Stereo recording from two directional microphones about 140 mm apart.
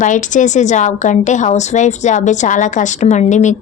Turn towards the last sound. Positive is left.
turn(degrees=60)  # may be behind; listen again after turning